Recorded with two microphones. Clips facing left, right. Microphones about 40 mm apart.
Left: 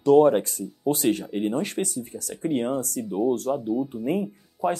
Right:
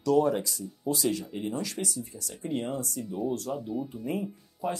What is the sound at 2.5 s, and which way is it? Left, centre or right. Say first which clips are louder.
Speech: left 6 dB; left.